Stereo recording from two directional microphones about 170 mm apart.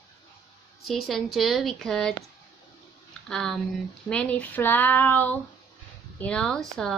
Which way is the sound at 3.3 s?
5° left (ahead or behind).